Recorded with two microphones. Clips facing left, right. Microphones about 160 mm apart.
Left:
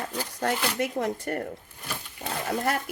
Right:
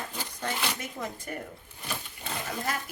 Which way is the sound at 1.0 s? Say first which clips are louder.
Left 8 dB; 70° left (ahead or behind).